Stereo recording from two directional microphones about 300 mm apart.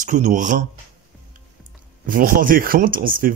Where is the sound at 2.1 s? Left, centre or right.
Right.